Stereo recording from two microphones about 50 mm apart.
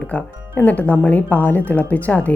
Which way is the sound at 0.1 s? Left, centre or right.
Left.